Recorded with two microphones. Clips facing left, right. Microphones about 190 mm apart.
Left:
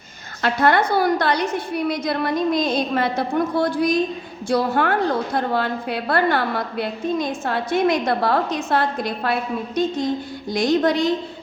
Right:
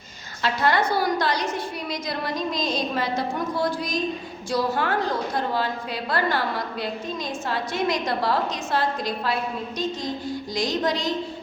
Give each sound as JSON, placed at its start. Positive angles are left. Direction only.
{"t": 0.4, "sound": "a woman's voice", "side_deg": 55}
{"t": 10.5, "sound": "a woman's voice", "side_deg": 60}